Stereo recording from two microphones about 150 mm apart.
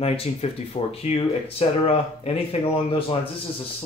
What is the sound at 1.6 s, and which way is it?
Speech, 40° left (ahead or behind).